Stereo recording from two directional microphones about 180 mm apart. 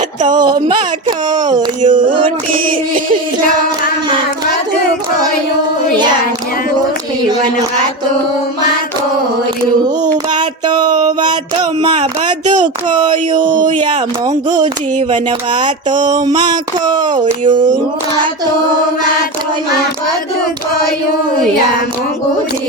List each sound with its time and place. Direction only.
0.3 s speech: 25° right (ahead or behind)
1.9 s a sound: 45° right (ahead or behind)
10.3 s music: 25° right (ahead or behind)
13.0 s speech: 25° right (ahead or behind)
14.6 s a sound: 45° right (ahead or behind)
16.8 s speech: 25° right (ahead or behind)